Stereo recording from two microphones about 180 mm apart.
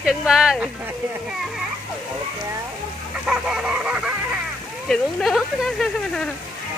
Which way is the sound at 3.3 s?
5° right (ahead or behind).